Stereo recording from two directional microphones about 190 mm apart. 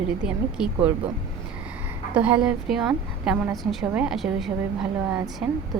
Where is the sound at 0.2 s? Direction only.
5° right (ahead or behind).